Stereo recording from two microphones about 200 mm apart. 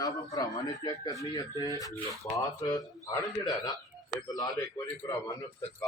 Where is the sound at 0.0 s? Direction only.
20° left (ahead or behind).